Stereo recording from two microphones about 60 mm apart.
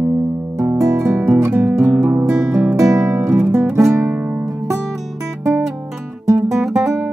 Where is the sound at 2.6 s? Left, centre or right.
Right.